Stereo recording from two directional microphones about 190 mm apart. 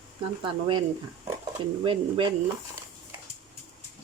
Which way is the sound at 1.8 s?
25° right (ahead or behind).